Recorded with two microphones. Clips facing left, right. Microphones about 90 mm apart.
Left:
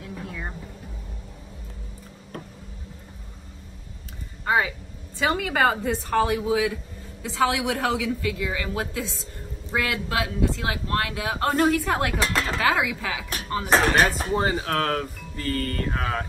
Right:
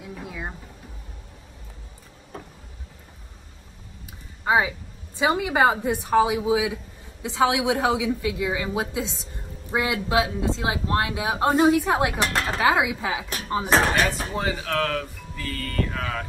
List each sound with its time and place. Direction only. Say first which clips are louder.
0.0 s a sound: even; 10° right (ahead or behind)
4.5 s a woman's voice: right 2 dB; 15° right (ahead or behind)
13.9 s speech: left 3 dB; 35° left (ahead or behind)